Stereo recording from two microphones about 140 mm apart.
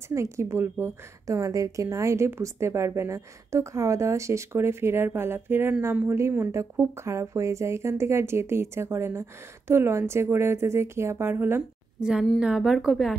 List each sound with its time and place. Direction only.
0.1 s a woman's voice: 20° right (ahead or behind)
12.1 s a woman's voice: 5° right (ahead or behind)